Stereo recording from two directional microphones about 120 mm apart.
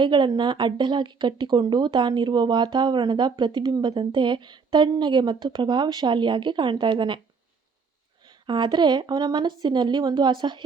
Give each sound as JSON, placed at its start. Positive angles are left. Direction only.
{"t": 0.0, "sound": "speech", "side_deg": -40}
{"t": 8.3, "sound": "speech", "side_deg": -40}